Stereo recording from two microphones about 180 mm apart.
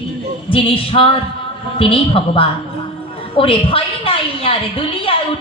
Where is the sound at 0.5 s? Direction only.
30° left (ahead or behind).